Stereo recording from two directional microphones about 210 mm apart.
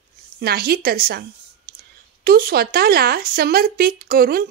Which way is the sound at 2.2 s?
45° right (ahead or behind).